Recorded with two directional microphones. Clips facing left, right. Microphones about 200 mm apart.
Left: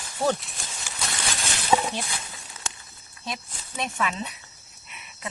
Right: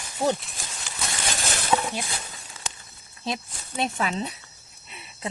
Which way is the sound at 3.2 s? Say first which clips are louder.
Right 4 dB; 30° right (ahead or behind).